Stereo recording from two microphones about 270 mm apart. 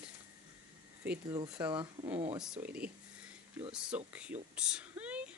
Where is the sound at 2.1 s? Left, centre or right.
Right.